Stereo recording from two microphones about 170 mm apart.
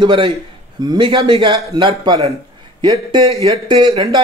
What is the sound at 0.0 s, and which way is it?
Speech, 30° right (ahead or behind).